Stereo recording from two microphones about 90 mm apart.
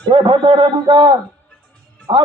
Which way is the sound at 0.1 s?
70° right (ahead or behind).